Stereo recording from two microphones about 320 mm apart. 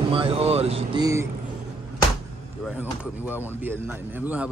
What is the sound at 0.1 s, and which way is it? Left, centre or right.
Speech, centre.